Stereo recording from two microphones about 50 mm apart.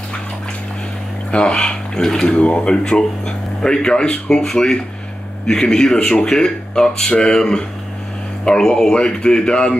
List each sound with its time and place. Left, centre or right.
1.3 s speech: centre
2.4 s speech: left
2.7 s speech: centre